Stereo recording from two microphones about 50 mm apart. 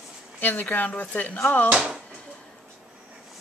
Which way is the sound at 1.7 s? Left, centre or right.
Right.